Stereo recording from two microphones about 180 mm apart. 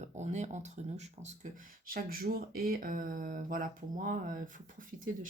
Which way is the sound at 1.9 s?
55° right (ahead or behind).